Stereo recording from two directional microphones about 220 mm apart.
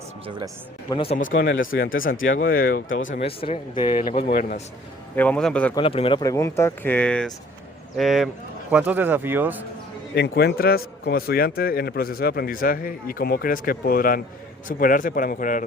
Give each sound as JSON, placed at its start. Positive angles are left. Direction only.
{"t": 0.9, "sound": "speech", "side_deg": 25}
{"t": 1.2, "sound": "speech", "side_deg": 55}
{"t": 1.7, "sound": "a man's voice", "side_deg": 40}
{"t": 3.2, "sound": "speech", "side_deg": 25}
{"t": 4.2, "sound": "speech", "side_deg": 45}
{"t": 5.1, "sound": "speech", "side_deg": 5}
{"t": 5.7, "sound": "speech", "side_deg": 25}
{"t": 10.2, "sound": "a man's voice", "side_deg": 45}